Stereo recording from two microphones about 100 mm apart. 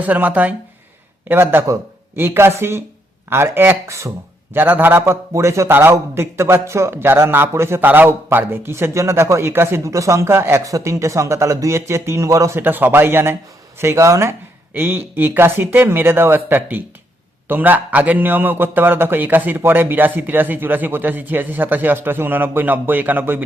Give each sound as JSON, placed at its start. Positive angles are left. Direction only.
{"t": 0.0, "sound": "a man's voice", "side_deg": -15}